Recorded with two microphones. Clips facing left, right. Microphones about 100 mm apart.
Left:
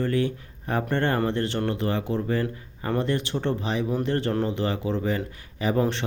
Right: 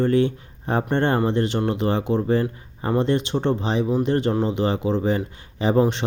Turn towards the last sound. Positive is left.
turn(degrees=-20)  # may be behind; listen again after turning